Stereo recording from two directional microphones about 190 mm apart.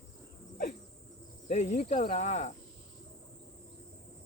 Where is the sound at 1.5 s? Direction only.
40° left (ahead or behind).